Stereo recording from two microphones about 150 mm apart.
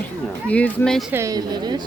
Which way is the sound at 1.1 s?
20° right (ahead or behind).